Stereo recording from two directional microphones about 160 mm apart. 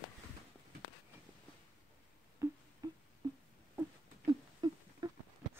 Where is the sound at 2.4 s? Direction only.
20° right (ahead or behind).